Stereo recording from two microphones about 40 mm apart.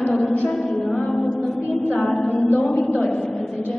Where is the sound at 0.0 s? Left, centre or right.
Centre.